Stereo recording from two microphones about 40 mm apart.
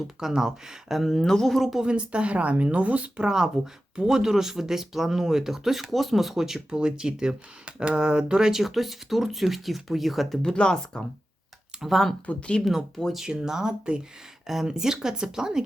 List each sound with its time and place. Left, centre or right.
0.2 s speech: centre
1.0 s speech: centre
1.8 s speech: right
3.2 s speech: centre
6.7 s speech: right
8.6 s speech: centre
10.4 s speech: centre
11.8 s speech: centre
12.2 s speech: left
13.0 s speech: centre
13.4 s speech: centre
14.4 s speech: centre